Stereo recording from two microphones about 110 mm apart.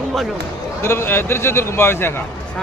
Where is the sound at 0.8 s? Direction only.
25° left (ahead or behind).